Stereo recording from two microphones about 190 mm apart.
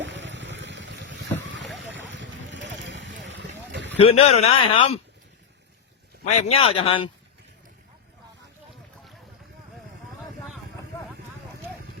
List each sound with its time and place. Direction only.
0.0 s boat: 75° right (ahead or behind)
1.7 s vehicle: 75° right (ahead or behind)
3.9 s speech: 35° left (ahead or behind)
6.2 s speech: 30° left (ahead or behind)